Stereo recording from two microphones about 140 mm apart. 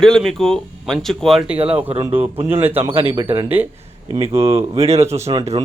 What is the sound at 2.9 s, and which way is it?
Speech, 40° right (ahead or behind).